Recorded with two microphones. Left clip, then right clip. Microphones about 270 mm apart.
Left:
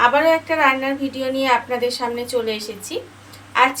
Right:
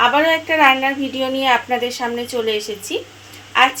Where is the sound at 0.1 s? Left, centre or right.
Right.